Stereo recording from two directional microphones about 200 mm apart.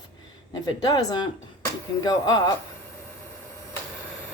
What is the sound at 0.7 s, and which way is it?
A woman's voice, 20° left (ahead or behind).